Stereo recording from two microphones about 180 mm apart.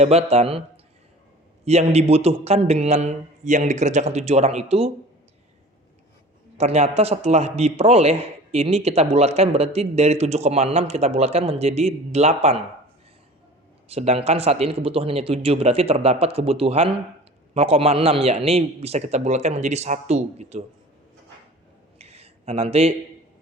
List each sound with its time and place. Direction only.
0.0 s a man's voice: 35° right (ahead or behind)
1.6 s a man's voice: 35° right (ahead or behind)
6.6 s a man's voice: 35° right (ahead or behind)
13.8 s a man's voice: 35° right (ahead or behind)
21.9 s a sound: 35° right (ahead or behind)